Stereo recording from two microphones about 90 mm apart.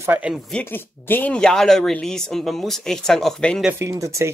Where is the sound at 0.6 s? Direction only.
25° left (ahead or behind).